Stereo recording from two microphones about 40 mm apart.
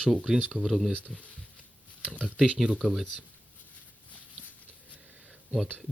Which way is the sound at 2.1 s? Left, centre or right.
Left.